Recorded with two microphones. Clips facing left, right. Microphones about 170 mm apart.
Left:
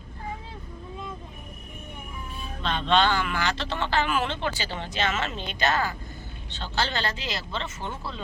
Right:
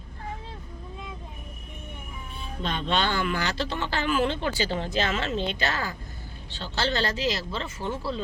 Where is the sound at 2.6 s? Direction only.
40° right (ahead or behind).